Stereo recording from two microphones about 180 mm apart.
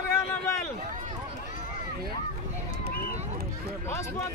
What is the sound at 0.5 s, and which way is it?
Run, 15° left (ahead or behind).